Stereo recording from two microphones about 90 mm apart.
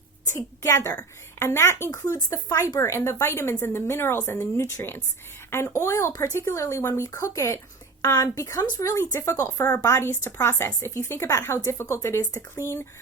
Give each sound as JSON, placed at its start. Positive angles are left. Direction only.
{"t": 0.3, "sound": "a woman's voice", "side_deg": 30}
{"t": 8.0, "sound": "speech", "side_deg": 40}